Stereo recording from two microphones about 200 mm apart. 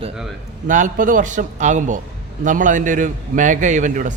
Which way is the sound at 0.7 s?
40° right (ahead or behind).